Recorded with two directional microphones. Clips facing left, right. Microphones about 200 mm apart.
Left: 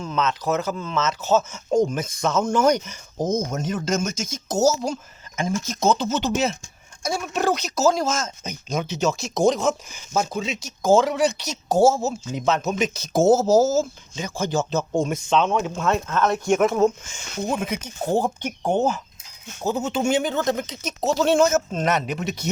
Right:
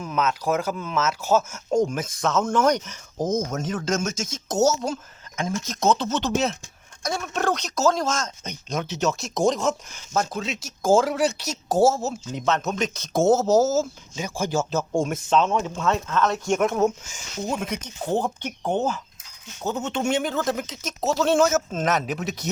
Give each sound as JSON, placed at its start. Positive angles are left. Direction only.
{"t": 0.0, "sound": "speech", "side_deg": -10}
{"t": 15.6, "sound": "speech", "side_deg": 10}
{"t": 17.2, "sound": "speech", "side_deg": 55}
{"t": 17.5, "sound": "speech", "side_deg": 0}